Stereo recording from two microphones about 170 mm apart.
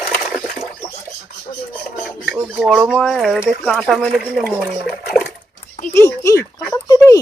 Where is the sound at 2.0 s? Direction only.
5° right (ahead or behind).